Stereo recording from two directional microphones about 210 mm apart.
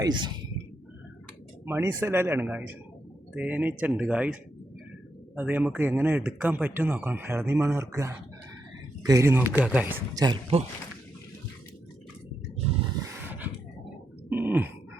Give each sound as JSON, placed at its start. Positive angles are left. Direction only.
{"t": 0.0, "sound": "speech", "side_deg": -20}
{"t": 1.6, "sound": "speech", "side_deg": -10}
{"t": 5.4, "sound": "speech", "side_deg": -10}
{"t": 13.2, "sound": "a sound", "side_deg": -10}